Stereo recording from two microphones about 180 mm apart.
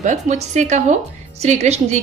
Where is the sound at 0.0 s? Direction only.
40° right (ahead or behind).